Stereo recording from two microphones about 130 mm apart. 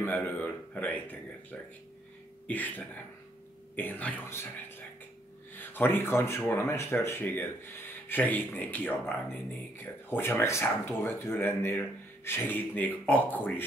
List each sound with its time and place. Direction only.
0.0 s speech: 10° left (ahead or behind)